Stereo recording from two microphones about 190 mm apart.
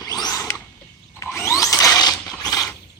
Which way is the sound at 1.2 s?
15° left (ahead or behind).